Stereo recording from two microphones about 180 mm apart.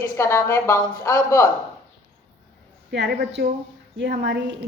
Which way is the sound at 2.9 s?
70° right (ahead or behind).